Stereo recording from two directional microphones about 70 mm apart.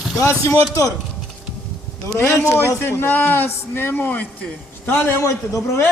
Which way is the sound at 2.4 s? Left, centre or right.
Left.